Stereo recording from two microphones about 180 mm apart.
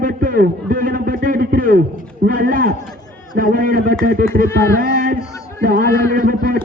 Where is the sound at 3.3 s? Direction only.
50° right (ahead or behind).